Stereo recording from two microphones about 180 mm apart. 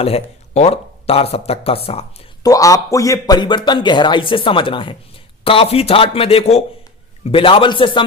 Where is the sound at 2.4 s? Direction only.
20° left (ahead or behind).